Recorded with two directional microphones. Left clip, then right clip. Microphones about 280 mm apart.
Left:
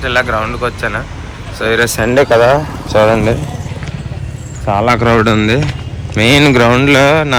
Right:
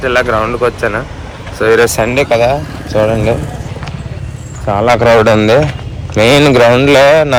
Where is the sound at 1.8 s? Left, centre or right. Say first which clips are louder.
Even; centre.